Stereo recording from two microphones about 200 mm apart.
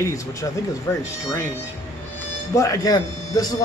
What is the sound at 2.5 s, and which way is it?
Speech, 15° left (ahead or behind).